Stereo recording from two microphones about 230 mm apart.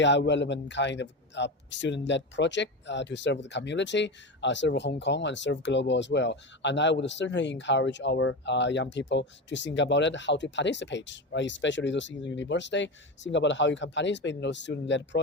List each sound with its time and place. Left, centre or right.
0.0 s a man's voice: left